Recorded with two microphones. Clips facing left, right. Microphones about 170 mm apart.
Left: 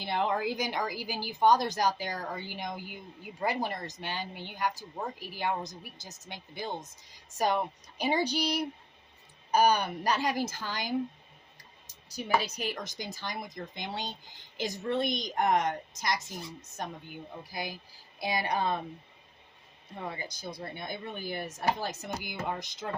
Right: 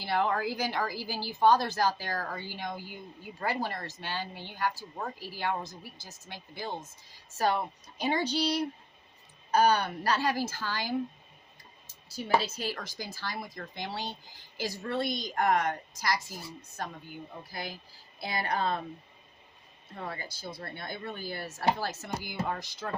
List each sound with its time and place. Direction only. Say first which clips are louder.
0.0 s speech: right 1 dB; 20° left (ahead or behind)
12.4 s a woman's voice: even; 15° left (ahead or behind)
17.5 s speech: left 3 dB; 15° left (ahead or behind)
20.1 s a woman's voice: left 1 dB; 15° left (ahead or behind)